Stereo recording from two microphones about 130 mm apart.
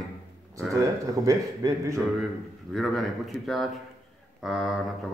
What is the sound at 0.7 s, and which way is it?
A man's voice, 25° right (ahead or behind).